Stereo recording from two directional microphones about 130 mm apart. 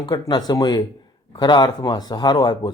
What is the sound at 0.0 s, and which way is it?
A man's voice, 35° left (ahead or behind).